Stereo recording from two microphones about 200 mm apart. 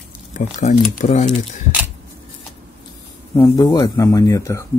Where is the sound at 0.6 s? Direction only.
35° left (ahead or behind).